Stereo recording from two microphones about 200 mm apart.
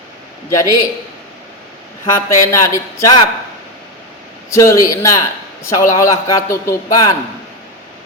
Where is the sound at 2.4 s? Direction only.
15° left (ahead or behind).